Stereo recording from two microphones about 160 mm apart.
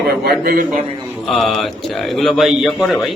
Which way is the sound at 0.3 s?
70° right (ahead or behind).